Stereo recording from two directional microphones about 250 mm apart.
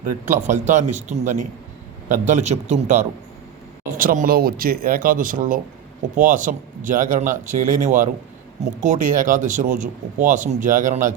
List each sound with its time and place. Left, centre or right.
0.0 s a man's voice: right